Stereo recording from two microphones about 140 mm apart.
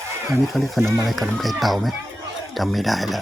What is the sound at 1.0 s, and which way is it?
Speech, centre (ahead or behind).